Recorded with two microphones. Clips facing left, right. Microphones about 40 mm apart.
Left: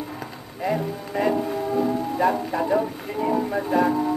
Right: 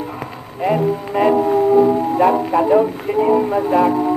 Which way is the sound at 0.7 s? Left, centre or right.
Right.